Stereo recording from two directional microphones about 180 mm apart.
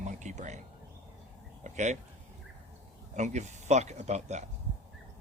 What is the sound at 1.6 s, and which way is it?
Speech, 40° right (ahead or behind).